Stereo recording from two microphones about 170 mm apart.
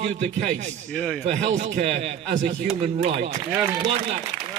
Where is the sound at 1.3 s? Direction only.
40° right (ahead or behind).